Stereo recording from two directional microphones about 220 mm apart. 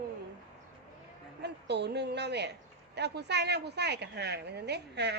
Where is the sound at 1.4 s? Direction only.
50° right (ahead or behind).